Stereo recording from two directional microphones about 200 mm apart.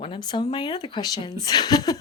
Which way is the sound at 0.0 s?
25° left (ahead or behind).